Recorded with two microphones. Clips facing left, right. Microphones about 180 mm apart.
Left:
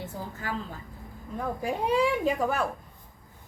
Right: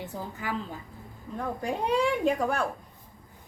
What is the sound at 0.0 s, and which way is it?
Speech, 15° right (ahead or behind).